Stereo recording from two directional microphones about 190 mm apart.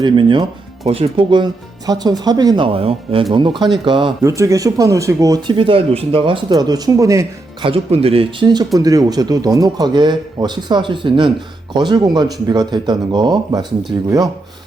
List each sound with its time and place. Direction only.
0.0 s speech: 25° right (ahead or behind)
4.2 s speech: 15° right (ahead or behind)
7.6 s speech: 30° right (ahead or behind)